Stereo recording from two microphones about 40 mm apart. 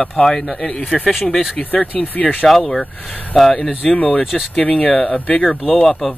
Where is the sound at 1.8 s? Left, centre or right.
Left.